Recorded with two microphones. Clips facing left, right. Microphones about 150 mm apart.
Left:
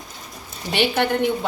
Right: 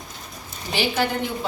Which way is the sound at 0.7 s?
65° left (ahead or behind).